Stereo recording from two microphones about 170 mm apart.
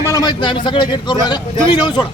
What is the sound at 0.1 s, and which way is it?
A man's voice, 25° left (ahead or behind).